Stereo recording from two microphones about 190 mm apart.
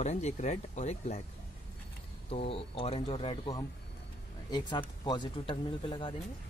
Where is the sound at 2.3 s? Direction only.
30° left (ahead or behind).